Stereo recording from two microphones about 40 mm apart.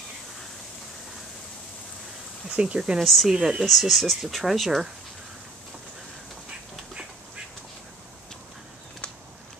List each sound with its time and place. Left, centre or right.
2.5 s speech: right
3.0 s speech: centre
3.3 s speech: centre
3.6 s speech: centre
6.9 s duck: right